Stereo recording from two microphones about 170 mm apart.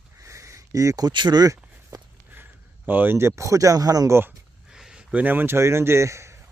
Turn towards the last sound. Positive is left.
turn(degrees=-15)  # may be behind; listen again after turning